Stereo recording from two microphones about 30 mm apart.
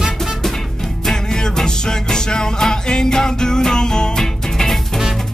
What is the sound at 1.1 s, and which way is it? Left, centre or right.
Music, left.